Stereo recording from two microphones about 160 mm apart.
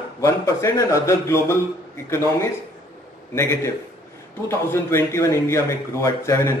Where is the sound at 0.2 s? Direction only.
20° left (ahead or behind).